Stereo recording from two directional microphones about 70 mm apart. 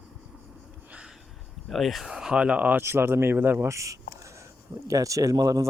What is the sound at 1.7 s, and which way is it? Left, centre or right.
Speech, centre.